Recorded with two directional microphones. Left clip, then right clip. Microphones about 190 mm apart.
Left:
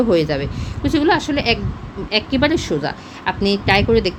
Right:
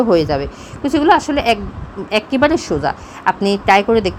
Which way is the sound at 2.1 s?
10° right (ahead or behind).